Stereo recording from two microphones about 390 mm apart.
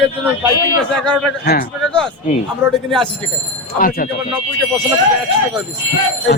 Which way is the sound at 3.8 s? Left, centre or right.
Left.